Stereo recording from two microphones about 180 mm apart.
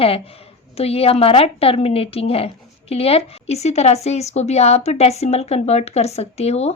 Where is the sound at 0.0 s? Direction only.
35° left (ahead or behind).